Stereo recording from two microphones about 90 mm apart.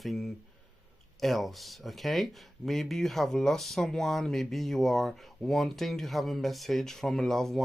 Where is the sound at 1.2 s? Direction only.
Centre (ahead or behind).